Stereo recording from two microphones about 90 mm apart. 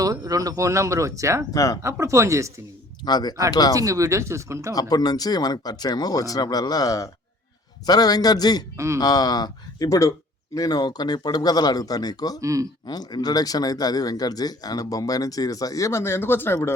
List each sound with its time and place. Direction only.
0.0 s speech: 40° right (ahead or behind)
1.5 s speech: 40° left (ahead or behind)
1.8 s speech: 35° right (ahead or behind)
3.0 s speech: 50° left (ahead or behind)
3.8 s speech: 35° right (ahead or behind)
4.7 s speech: 45° left (ahead or behind)
12.4 s speech: 35° right (ahead or behind)
12.8 s speech: 50° left (ahead or behind); by 16.6 s 25° left (ahead or behind)